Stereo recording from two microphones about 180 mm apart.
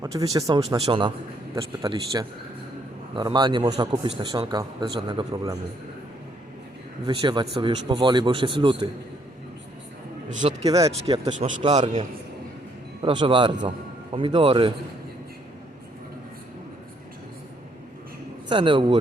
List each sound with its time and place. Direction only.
0.0 s a man's voice: 20° right (ahead or behind)
7.1 s a man's voice: 25° right (ahead or behind)
10.2 s speech: 45° right (ahead or behind)
10.7 s a man's voice: 20° right (ahead or behind)
11.1 s speech: 40° right (ahead or behind)
11.6 s a man's voice: 25° right (ahead or behind)
18.4 s a man's voice: 25° right (ahead or behind)